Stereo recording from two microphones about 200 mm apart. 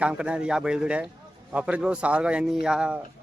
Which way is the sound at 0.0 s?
5° right (ahead or behind).